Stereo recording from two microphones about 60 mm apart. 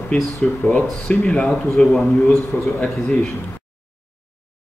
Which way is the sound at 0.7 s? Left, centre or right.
Centre.